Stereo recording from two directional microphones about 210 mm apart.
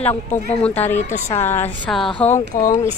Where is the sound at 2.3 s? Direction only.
35° left (ahead or behind).